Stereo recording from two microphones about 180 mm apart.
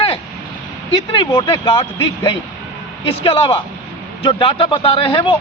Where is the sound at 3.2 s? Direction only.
30° left (ahead or behind).